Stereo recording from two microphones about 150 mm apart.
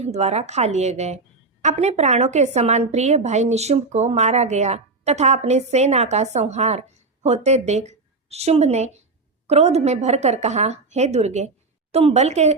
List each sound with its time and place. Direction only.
0.0 s a woman's voice: 50° right (ahead or behind)